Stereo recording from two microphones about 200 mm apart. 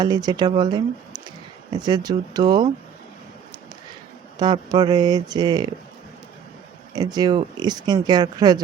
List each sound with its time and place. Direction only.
0.0 s speech: 20° right (ahead or behind)
4.4 s speech: 20° right (ahead or behind)
6.9 s speech: 20° right (ahead or behind)